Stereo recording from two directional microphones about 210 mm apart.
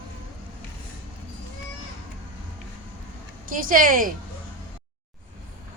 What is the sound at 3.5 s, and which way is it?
Speech, 40° right (ahead or behind).